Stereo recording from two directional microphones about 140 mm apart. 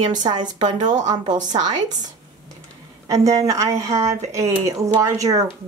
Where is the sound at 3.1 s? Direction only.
25° right (ahead or behind).